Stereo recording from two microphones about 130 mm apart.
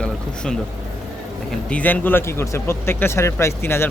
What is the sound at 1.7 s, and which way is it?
Speech, 10° left (ahead or behind).